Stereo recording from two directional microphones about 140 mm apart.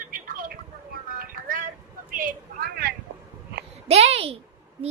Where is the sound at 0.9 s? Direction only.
85° right.